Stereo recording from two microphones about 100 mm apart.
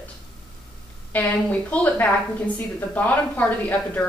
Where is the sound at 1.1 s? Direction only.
15° left (ahead or behind).